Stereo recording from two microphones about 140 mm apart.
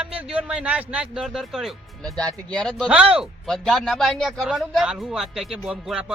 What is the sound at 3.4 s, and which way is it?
Speech, 5° left (ahead or behind).